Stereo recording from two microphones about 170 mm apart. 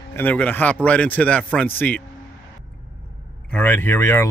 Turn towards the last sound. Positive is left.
turn(degrees=15)  # may be behind; listen again after turning